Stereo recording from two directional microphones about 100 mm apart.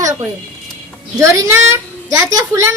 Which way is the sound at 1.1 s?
30° right (ahead or behind).